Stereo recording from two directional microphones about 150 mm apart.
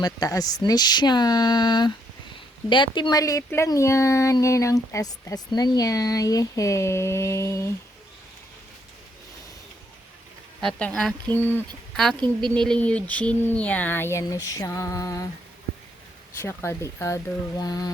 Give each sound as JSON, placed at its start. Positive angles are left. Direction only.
{"t": 0.0, "sound": "speech", "side_deg": 25}
{"t": 10.6, "sound": "speech", "side_deg": 5}
{"t": 16.4, "sound": "speech", "side_deg": 15}